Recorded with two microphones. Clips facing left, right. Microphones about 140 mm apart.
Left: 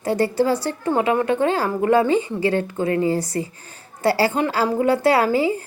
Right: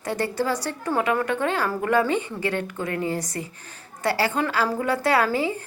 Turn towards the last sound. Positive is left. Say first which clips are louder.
# left 4 dB
turn(degrees=25)  # may be behind; listen again after turning